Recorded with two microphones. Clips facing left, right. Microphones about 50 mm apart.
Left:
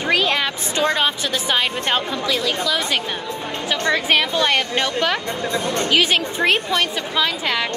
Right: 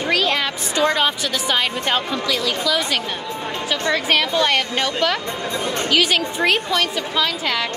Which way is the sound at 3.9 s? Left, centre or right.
Left.